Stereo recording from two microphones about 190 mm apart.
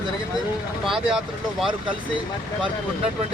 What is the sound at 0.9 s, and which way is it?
Speech, 5° right (ahead or behind).